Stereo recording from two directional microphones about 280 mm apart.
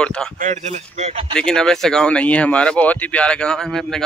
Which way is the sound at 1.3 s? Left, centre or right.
Centre.